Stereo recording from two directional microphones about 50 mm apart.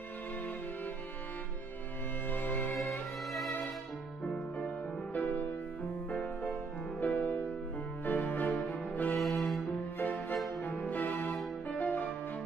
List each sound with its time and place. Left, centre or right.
2.3 s music: left
4.2 s music: left
9.1 s music: centre
9.9 s music: left